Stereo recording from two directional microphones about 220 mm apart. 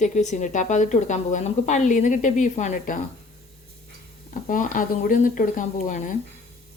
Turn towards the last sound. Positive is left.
turn(degrees=35)  # may be behind; listen again after turning